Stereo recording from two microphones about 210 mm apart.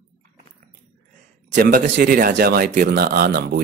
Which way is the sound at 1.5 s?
45° right (ahead or behind).